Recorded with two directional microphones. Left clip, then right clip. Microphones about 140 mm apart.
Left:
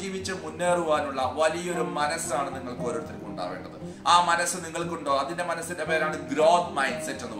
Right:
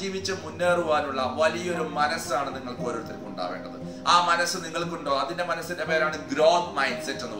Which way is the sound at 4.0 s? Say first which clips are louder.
Even; 20° left (ahead or behind).